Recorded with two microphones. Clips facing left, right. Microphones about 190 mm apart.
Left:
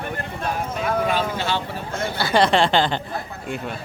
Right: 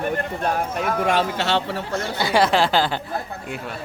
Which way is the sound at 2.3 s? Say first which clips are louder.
Left 1 dB; 5° right (ahead or behind).